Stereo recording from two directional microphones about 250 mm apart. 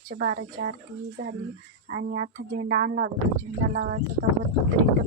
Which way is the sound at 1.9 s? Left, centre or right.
Right.